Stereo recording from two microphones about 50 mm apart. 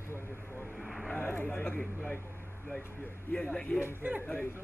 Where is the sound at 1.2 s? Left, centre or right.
Left.